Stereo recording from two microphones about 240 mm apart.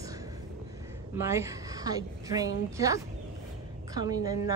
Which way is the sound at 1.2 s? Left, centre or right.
Centre.